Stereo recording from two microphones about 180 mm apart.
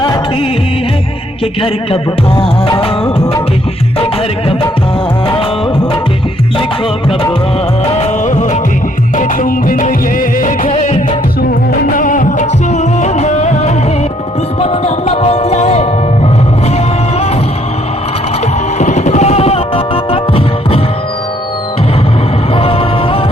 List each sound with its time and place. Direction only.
1.6 s music: 30° left (ahead or behind)
7.9 s music: 35° left (ahead or behind)
18.8 s music: 40° left (ahead or behind)
22.5 s music: 30° left (ahead or behind)